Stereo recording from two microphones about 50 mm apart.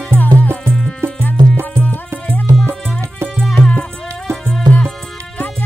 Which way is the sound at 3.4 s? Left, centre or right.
Centre.